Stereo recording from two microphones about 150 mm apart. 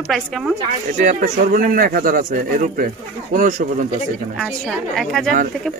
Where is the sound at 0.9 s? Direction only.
65° right (ahead or behind).